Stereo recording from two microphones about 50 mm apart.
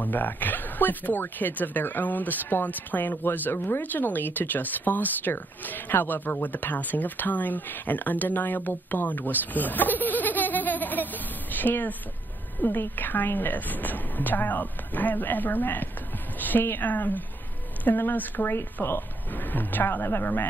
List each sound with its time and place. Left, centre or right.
0.0 s a woman's voice: left